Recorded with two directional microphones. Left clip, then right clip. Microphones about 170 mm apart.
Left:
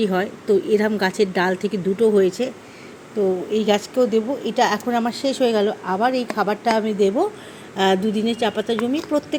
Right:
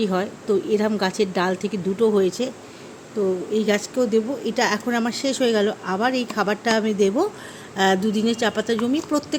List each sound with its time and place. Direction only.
0.0 s a woman's voice: 5° right (ahead or behind)
3.5 s speech: centre (ahead or behind); by 6.9 s 20° right (ahead or behind)
7.8 s speech: 10° right (ahead or behind)
8.1 s a woman's voice: 20° right (ahead or behind)